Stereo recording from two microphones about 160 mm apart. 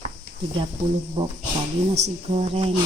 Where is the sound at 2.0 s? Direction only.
45° right (ahead or behind).